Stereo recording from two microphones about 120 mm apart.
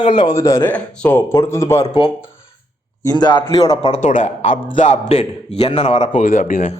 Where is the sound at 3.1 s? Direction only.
35° left (ahead or behind).